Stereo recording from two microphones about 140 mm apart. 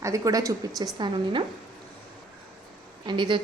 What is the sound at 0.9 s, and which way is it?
Speech, 35° right (ahead or behind).